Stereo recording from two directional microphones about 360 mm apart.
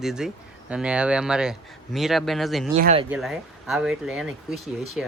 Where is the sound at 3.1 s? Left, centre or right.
Centre.